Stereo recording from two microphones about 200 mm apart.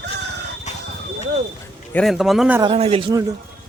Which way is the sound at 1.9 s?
Centre (ahead or behind).